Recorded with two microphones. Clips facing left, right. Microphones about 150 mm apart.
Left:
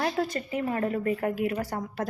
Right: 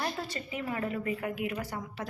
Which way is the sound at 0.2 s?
45° left (ahead or behind).